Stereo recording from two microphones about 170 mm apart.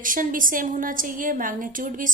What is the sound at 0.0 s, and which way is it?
A woman's voice, 50° right (ahead or behind).